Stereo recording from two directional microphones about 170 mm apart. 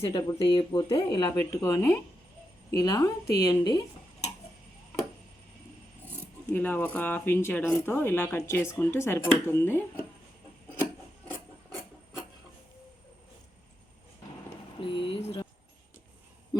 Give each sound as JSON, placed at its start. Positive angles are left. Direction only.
{"t": 0.0, "sound": "speech", "side_deg": 25}
{"t": 6.5, "sound": "speech", "side_deg": 10}
{"t": 14.8, "sound": "a sound", "side_deg": 30}